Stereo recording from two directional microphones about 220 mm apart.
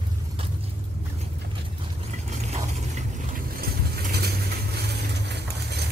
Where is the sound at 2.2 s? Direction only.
30° right (ahead or behind).